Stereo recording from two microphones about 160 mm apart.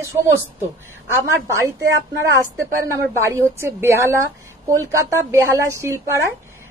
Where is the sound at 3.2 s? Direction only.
15° right (ahead or behind).